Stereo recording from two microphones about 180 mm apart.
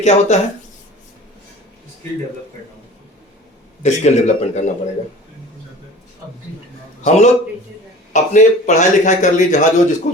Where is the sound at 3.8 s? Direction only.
40° left (ahead or behind).